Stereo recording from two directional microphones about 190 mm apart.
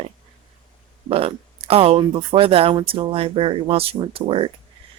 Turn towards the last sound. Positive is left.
turn(degrees=-30)  # may be behind; listen again after turning